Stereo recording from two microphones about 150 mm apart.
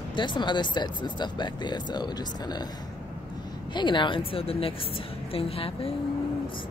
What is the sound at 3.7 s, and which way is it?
A woman's voice, 30° left (ahead or behind).